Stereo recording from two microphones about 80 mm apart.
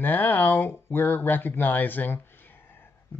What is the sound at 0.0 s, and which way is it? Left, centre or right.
Speech, left.